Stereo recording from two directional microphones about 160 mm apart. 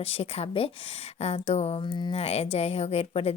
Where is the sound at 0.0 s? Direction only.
40° left (ahead or behind).